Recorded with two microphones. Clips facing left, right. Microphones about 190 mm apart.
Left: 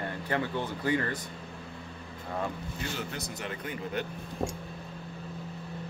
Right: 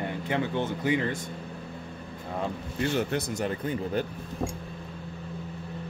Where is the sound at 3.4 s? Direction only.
35° right (ahead or behind).